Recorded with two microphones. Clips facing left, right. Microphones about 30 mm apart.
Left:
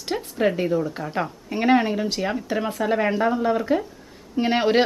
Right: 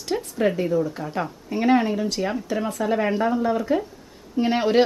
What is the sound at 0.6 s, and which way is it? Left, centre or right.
Speech, centre.